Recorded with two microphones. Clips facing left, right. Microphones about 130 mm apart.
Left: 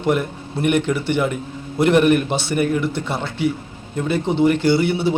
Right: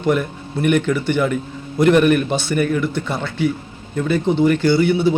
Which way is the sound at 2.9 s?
30° left (ahead or behind).